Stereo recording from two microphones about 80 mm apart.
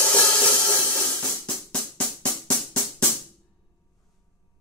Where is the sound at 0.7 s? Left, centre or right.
Left.